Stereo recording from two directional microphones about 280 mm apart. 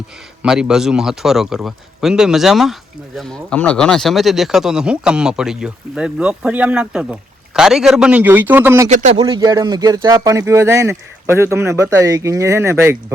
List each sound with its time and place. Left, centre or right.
0.4 s speech: centre
8.9 s speech: right
9.1 s speech: centre